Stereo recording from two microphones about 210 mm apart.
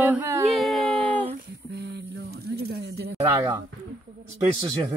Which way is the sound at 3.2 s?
15° right (ahead or behind).